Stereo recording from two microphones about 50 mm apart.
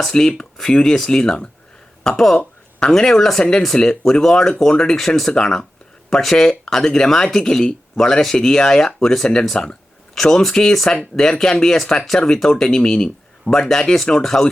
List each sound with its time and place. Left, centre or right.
0.0 s speech: centre